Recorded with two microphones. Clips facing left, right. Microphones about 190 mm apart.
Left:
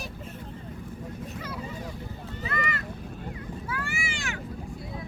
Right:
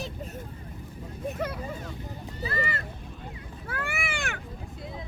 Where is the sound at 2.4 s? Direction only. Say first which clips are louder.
Right 1 dB; 35° right (ahead or behind).